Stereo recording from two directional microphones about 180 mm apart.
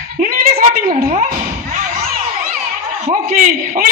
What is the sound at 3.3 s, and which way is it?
Speech, 50° right (ahead or behind).